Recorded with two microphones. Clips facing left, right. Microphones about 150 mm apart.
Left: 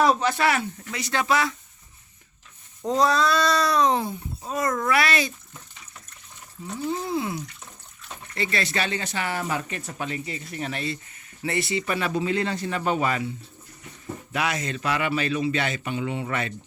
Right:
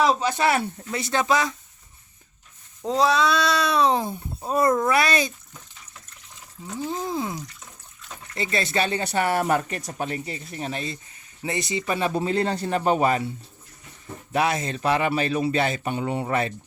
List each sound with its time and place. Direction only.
0.2 s speech: 15° right (ahead or behind)
0.4 s a child's voice: 25° right (ahead or behind)
2.8 s speech: centre (ahead or behind)
4.0 s a child's voice: 30° right (ahead or behind)
6.7 s speech: 15° right (ahead or behind)
8.4 s a child's voice: 25° right (ahead or behind)
9.1 s a man's voice: 55° right (ahead or behind); by 10.9 s 30° right (ahead or behind)
11.4 s a man's voice: 20° right (ahead or behind); by 13.2 s 40° right (ahead or behind)
14.3 s a man's voice: 30° right (ahead or behind)